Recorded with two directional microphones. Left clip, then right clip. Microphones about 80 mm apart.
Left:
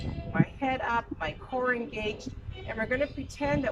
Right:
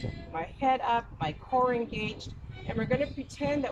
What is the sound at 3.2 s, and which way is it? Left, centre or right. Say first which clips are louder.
Speech: even; right.